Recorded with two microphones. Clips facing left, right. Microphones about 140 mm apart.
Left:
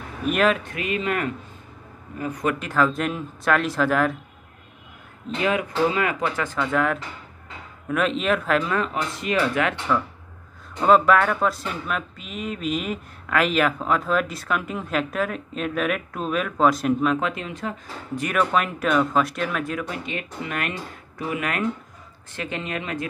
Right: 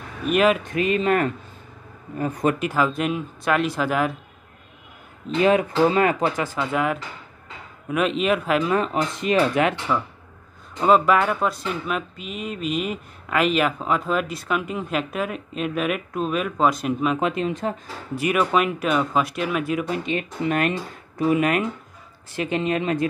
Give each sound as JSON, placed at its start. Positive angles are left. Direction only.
{"t": 0.3, "sound": "speech", "side_deg": -5}
{"t": 0.7, "sound": "speech", "side_deg": -30}
{"t": 2.6, "sound": "speech", "side_deg": -10}
{"t": 5.4, "sound": "speech", "side_deg": -30}
{"t": 6.3, "sound": "speech", "side_deg": -10}
{"t": 8.6, "sound": "speech", "side_deg": -20}
{"t": 10.8, "sound": "speech", "side_deg": -5}
{"t": 17.2, "sound": "speech", "side_deg": -25}
{"t": 18.1, "sound": "speech", "side_deg": -10}
{"t": 19.9, "sound": "speech", "side_deg": -25}